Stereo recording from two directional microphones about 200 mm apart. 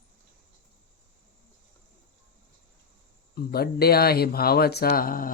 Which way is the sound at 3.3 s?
50° left (ahead or behind).